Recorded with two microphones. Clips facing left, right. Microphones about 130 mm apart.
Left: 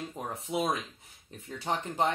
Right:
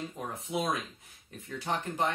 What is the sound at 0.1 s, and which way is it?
Speech, 25° left (ahead or behind).